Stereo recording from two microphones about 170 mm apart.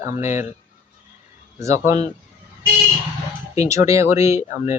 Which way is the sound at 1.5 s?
15° right (ahead or behind).